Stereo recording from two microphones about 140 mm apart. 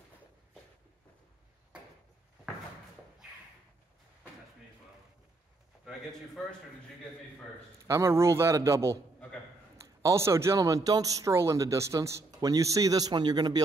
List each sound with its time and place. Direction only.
7.8 s speech: 20° right (ahead or behind)
10.0 s speech: 20° right (ahead or behind)